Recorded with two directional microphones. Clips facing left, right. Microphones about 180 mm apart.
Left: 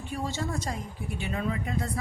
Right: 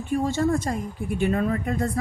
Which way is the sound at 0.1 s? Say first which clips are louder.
Right 10 dB; 50° right (ahead or behind).